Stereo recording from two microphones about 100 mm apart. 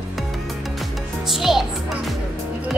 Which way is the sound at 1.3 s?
5° right (ahead or behind).